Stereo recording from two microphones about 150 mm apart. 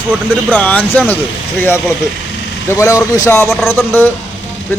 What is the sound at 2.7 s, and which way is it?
Speech, 20° left (ahead or behind).